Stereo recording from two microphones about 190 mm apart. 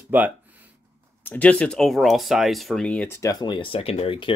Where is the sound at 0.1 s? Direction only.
10° right (ahead or behind).